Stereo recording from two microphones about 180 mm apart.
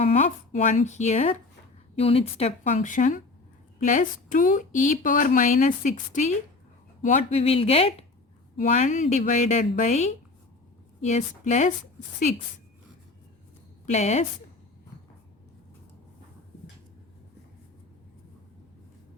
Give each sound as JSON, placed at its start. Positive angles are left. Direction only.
{"t": 0.0, "sound": "a woman's voice", "side_deg": 40}
{"t": 13.9, "sound": "a woman's voice", "side_deg": 40}